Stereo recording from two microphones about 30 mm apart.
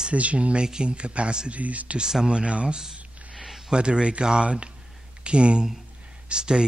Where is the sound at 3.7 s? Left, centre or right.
Right.